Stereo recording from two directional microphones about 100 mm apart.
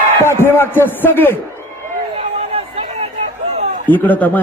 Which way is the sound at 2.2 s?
85° right.